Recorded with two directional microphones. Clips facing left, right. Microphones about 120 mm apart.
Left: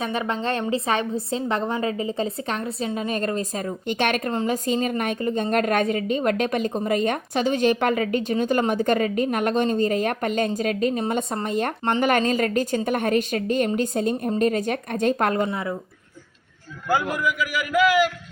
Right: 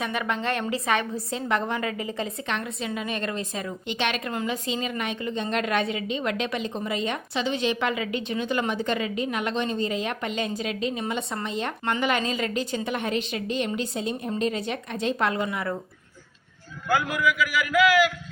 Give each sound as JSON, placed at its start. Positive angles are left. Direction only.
{"t": 0.0, "sound": "a woman's voice", "side_deg": 30}
{"t": 4.3, "sound": "a woman's voice", "side_deg": 35}